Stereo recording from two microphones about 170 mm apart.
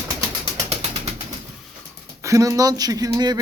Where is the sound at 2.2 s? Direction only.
20° right (ahead or behind).